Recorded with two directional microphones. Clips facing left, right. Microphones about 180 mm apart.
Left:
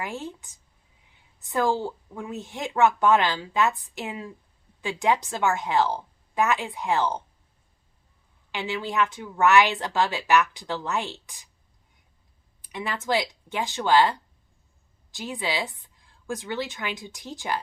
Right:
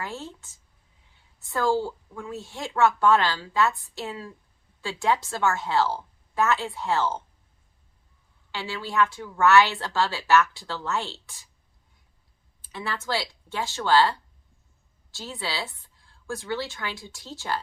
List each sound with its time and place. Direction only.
0.0 s speech: 15° left (ahead or behind)
8.5 s speech: 20° left (ahead or behind)
12.6 s speech: 15° left (ahead or behind)